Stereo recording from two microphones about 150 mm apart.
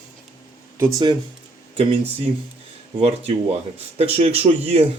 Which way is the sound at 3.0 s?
45° right (ahead or behind).